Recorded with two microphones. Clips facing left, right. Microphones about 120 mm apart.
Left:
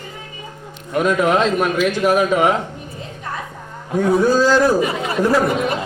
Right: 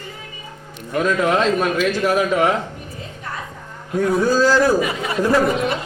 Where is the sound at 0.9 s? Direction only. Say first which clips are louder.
Left 2 dB; 15° left (ahead or behind).